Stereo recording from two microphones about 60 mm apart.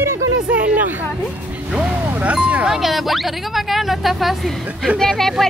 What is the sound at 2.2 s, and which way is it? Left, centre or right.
Speech, centre.